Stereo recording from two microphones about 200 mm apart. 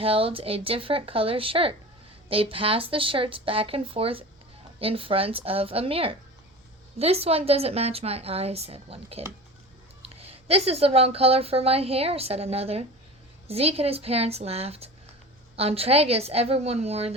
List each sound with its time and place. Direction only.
0.0 s a woman's voice: 30° right (ahead or behind)